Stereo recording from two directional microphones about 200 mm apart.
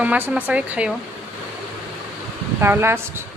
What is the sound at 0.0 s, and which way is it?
Speech, 10° right (ahead or behind).